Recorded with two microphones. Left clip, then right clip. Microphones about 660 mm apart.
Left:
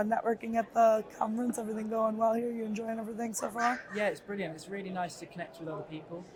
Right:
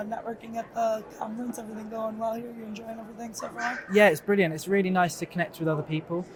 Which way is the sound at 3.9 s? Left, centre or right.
Right.